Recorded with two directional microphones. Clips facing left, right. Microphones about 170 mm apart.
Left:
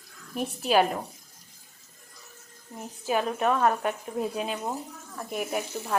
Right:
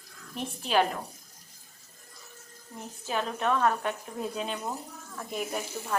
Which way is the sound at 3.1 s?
10° left (ahead or behind).